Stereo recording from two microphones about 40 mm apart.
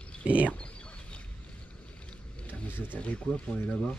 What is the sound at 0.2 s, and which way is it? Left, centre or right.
Speech, right.